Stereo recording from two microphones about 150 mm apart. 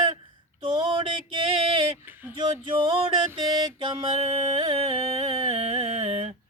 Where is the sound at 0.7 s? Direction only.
30° right (ahead or behind).